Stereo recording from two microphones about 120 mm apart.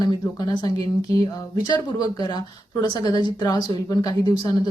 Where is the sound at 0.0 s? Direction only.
35° left (ahead or behind).